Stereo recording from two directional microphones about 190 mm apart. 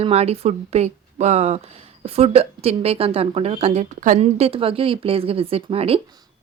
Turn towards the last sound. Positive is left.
turn(degrees=-30)  # may be behind; listen again after turning